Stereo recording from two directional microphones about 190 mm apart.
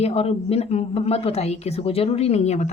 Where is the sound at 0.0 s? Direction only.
30° left (ahead or behind).